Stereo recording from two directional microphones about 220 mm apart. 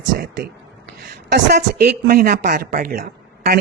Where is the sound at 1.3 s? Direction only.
50° right (ahead or behind).